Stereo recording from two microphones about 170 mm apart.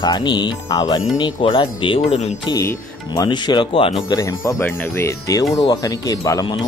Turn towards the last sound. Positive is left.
turn(degrees=20)  # may be behind; listen again after turning